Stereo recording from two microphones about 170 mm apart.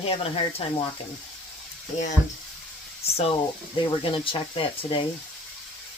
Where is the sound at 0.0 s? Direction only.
35° left (ahead or behind).